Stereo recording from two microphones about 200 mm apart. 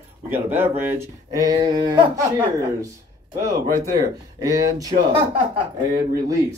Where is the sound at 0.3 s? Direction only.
10° right (ahead or behind).